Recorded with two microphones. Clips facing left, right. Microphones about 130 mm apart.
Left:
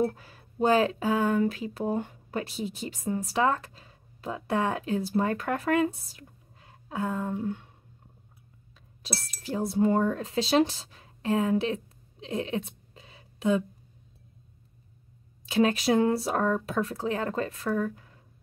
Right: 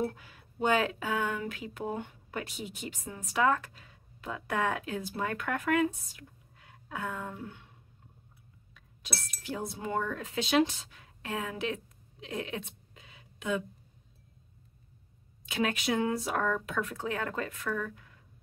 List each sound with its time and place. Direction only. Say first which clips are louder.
0.0 s speech: left 6 dB; 40° left (ahead or behind)
8.7 s speech: left 5 dB; 35° left (ahead or behind)
15.4 s speech: left 7 dB; 35° left (ahead or behind)